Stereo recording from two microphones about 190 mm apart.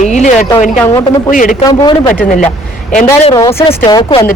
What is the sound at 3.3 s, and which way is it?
Speech, 15° left (ahead or behind).